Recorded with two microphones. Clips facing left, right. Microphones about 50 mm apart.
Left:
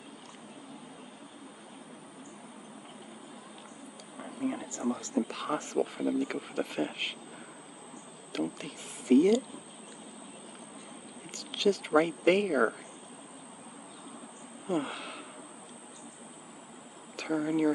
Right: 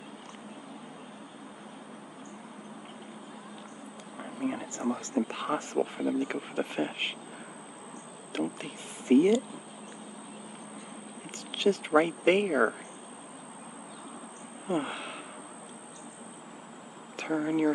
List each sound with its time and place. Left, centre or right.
4.2 s speech: right
5.8 s speech: centre
8.3 s speech: right
11.3 s speech: right
14.7 s speech: right
17.2 s speech: centre